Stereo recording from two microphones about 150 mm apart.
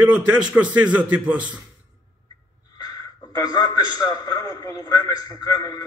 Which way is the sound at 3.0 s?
25° left (ahead or behind).